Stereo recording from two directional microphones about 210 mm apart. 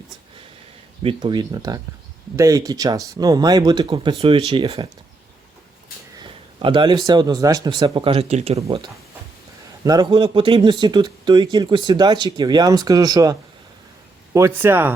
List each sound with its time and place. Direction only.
1.0 s a man's voice: 20° right (ahead or behind)
6.1 s a man's voice: 25° right (ahead or behind)
9.8 s a man's voice: 20° right (ahead or behind)
14.3 s speech: 10° right (ahead or behind)